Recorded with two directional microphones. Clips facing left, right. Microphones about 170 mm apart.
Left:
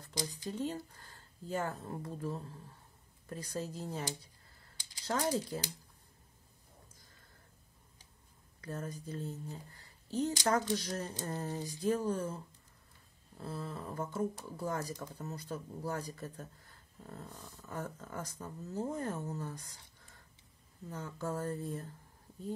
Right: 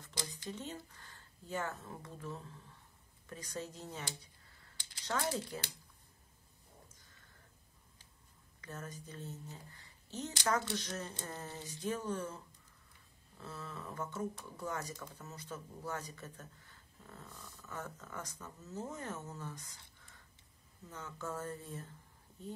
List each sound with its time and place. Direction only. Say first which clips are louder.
0.5 s speech: left 7 dB; 35° left (ahead or behind)
8.5 s speech: left 6 dB; 35° left (ahead or behind)
13.4 s speech: left 5 dB; 30° left (ahead or behind)
20.9 s speech: left 5 dB; 35° left (ahead or behind)